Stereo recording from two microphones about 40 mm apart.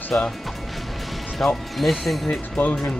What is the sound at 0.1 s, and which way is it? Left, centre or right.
Speech, left.